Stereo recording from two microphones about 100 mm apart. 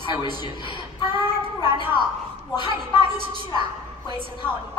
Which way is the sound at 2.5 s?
50° left (ahead or behind).